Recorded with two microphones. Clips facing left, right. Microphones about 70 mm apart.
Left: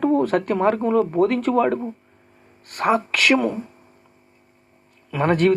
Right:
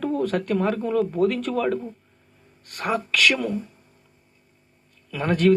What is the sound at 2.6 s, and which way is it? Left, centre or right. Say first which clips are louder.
Speech: left 6 dB; left.